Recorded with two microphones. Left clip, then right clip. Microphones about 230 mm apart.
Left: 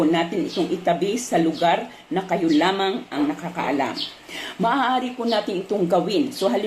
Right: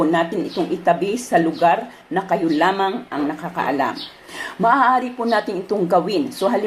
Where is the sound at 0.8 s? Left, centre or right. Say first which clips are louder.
Right 6 dB; centre.